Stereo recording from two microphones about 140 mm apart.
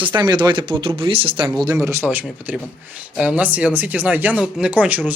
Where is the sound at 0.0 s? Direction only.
30° right (ahead or behind).